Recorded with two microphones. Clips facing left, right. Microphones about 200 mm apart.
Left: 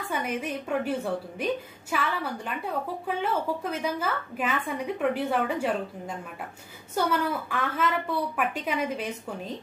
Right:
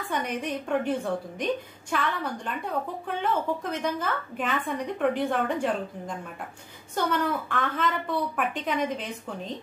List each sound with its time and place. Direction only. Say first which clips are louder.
0.1 s a woman's voice: right 1 dB; 5° left (ahead or behind)